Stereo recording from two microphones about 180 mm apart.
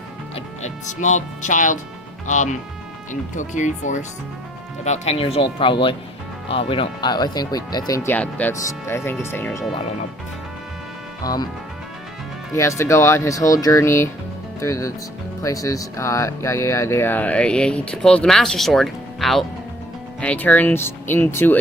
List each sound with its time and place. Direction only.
0.3 s speech: 40° left (ahead or behind); by 9.6 s 15° left (ahead or behind)
11.2 s speech: 20° left (ahead or behind)
12.5 s speech: 15° left (ahead or behind)